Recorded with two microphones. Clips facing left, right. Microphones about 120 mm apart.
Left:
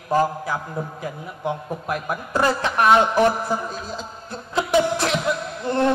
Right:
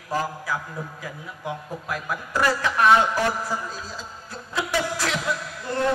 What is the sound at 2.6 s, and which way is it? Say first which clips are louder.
A man's voice: left 1 dB; 25° left (ahead or behind).